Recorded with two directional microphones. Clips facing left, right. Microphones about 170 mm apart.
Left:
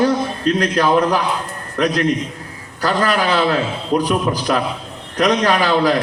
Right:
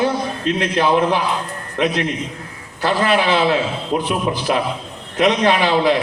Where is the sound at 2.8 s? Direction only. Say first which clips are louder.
Right 1 dB; 40° left (ahead or behind).